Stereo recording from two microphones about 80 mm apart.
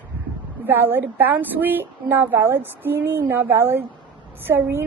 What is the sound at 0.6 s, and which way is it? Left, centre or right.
A woman's voice, right.